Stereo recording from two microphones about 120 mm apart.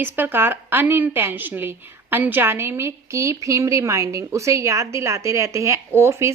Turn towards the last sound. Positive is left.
turn(degrees=-25)  # may be behind; listen again after turning